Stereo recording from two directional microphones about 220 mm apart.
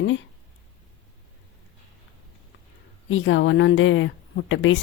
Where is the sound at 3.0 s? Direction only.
60° left (ahead or behind).